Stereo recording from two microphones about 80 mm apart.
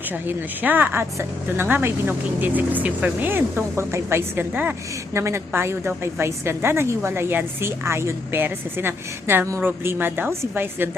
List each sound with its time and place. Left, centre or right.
0.3 s a woman's voice: right